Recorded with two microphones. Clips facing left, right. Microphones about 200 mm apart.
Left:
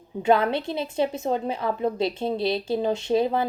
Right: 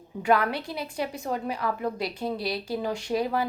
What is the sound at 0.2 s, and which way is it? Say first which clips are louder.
A woman's voice: left 3 dB; 25° left (ahead or behind).